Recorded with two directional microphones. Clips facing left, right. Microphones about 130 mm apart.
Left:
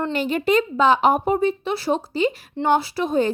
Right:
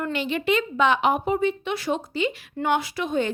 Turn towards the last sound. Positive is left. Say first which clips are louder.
# left 4 dB
turn(degrees=35)  # may be behind; listen again after turning